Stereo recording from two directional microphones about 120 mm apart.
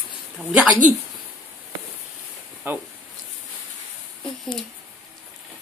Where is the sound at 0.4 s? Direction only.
10° right (ahead or behind).